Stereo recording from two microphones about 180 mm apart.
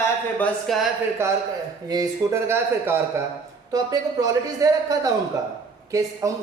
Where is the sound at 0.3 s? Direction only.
5° left (ahead or behind).